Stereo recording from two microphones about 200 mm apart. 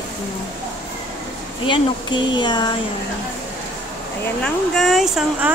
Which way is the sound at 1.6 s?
25° left (ahead or behind).